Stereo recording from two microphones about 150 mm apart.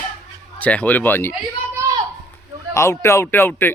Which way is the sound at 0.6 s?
10° left (ahead or behind).